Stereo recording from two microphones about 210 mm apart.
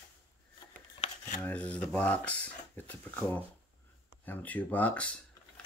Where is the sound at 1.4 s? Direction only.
5° left (ahead or behind).